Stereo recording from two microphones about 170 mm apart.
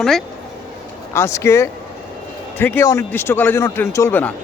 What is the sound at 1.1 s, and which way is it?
Speech, 15° left (ahead or behind).